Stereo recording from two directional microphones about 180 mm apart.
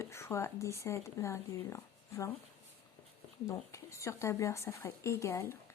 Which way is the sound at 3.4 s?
15° left (ahead or behind).